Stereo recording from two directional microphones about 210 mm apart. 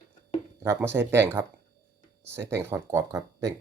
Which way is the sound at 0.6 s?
10° right (ahead or behind).